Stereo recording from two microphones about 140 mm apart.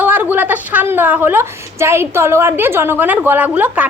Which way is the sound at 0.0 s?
15° right (ahead or behind).